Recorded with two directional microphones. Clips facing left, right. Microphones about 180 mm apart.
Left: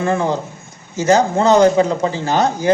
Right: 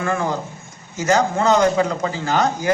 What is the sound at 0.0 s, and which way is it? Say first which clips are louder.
A man's voice: left 4 dB; 25° left (ahead or behind).